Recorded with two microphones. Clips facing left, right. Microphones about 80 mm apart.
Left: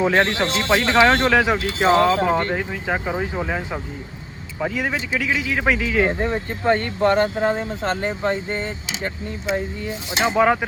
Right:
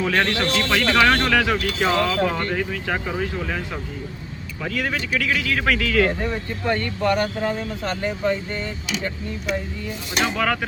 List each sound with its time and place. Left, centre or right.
0.0 s speech: left
4.6 s speech: centre